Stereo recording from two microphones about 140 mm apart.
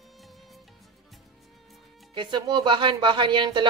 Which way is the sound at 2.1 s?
35° right (ahead or behind).